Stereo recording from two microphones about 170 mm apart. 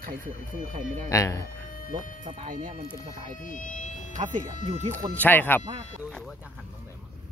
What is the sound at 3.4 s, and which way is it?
Insect, 50° left (ahead or behind).